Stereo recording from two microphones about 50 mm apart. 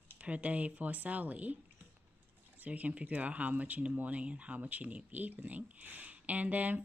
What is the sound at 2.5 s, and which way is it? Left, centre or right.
Speech, right.